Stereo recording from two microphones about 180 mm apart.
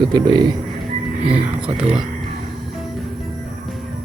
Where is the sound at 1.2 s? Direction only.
5° right (ahead or behind).